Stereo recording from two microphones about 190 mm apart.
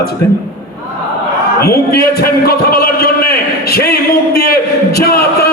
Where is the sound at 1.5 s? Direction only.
55° left (ahead or behind).